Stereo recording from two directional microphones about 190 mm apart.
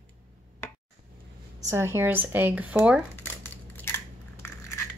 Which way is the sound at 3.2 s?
10° left (ahead or behind).